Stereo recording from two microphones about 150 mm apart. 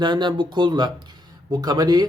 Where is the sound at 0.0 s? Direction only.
30° right (ahead or behind).